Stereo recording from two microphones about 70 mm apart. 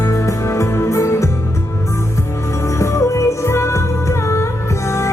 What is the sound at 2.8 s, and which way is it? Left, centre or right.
Music, left.